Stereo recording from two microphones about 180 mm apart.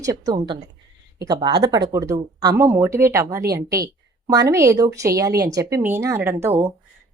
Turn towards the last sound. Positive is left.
turn(degrees=-10)  # may be behind; listen again after turning